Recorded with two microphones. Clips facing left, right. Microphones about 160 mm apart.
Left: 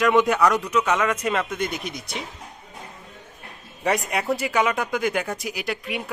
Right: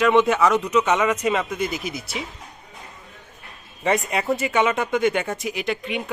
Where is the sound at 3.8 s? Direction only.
Centre (ahead or behind).